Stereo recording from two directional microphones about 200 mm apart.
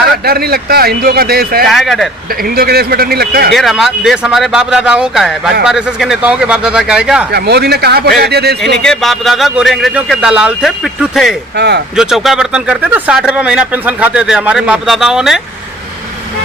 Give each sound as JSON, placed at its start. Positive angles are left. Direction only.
{"t": 0.3, "sound": "speech", "side_deg": -50}
{"t": 1.6, "sound": "speech", "side_deg": 0}
{"t": 2.4, "sound": "speech", "side_deg": -50}
{"t": 3.5, "sound": "speech", "side_deg": 0}
{"t": 7.3, "sound": "speech", "side_deg": -55}
{"t": 8.8, "sound": "speech", "side_deg": 0}
{"t": 11.5, "sound": "speech", "side_deg": -55}
{"t": 11.9, "sound": "speech", "side_deg": 0}